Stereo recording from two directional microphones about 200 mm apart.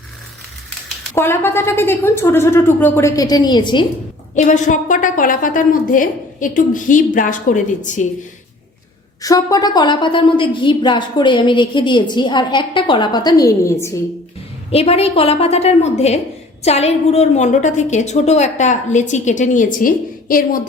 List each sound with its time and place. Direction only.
1.1 s a woman's voice: 10° left (ahead or behind)
4.4 s a woman's voice: 40° left (ahead or behind)
9.2 s a woman's voice: 15° left (ahead or behind)
14.7 s a woman's voice: 30° left (ahead or behind)